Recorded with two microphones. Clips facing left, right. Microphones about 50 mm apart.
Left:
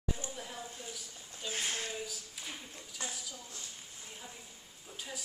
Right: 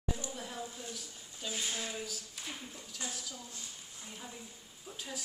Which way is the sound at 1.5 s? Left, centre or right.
Left.